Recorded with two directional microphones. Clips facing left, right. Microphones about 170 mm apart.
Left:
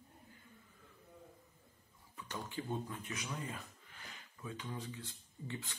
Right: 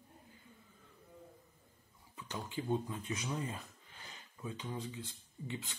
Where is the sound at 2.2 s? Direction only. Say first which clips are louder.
Right 2 dB; 20° right (ahead or behind).